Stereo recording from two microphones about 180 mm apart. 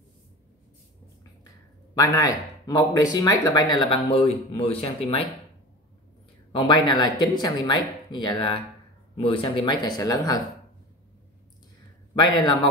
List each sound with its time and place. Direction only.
2.0 s speech: 20° left (ahead or behind)
6.5 s speech: 25° left (ahead or behind)